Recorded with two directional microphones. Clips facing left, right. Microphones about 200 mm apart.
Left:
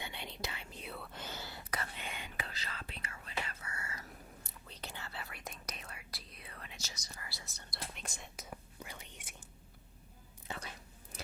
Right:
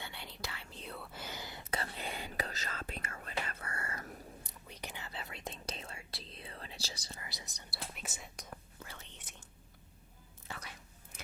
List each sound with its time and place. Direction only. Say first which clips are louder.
0.0 s whispering: left 2 dB; 20° left (ahead or behind)
0.9 s whispering: right 1 dB; centre (ahead or behind); by 4.1 s 55° right (ahead or behind)
4.7 s whispering: right 1 dB; 15° right (ahead or behind); by 7.2 s 30° right (ahead or behind)
7.2 s whispering: right 1 dB; 20° right (ahead or behind)
7.9 s whispering: right 1 dB; 5° right (ahead or behind)
8.8 s whispering: left 2 dB; 15° left (ahead or behind)
10.5 s whispering: left 3 dB; 20° left (ahead or behind)